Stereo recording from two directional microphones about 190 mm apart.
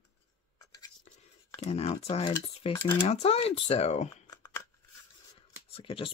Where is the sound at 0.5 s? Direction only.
20° left (ahead or behind).